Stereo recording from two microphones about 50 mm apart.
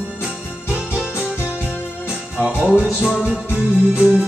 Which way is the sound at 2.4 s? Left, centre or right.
Centre.